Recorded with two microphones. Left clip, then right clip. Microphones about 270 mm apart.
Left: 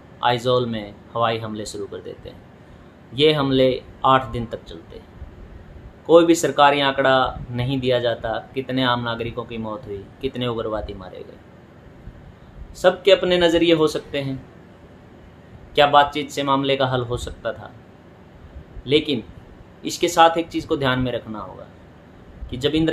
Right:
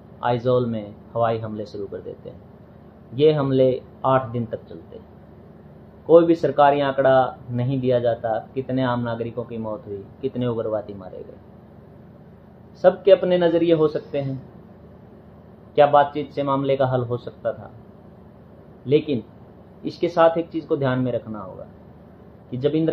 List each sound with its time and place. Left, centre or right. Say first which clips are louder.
0.2 s speech: left 2 dB; left
3.2 s speech: even; left
6.0 s speech: left 1 dB; left
12.8 s speech: even; left
15.7 s speech: left 1 dB; left
18.9 s speech: left 1 dB; left
22.5 s speech: left 1 dB; left